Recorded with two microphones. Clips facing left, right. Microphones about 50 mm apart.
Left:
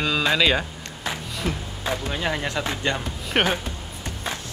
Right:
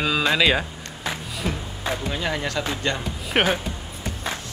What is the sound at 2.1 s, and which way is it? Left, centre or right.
Speech, centre.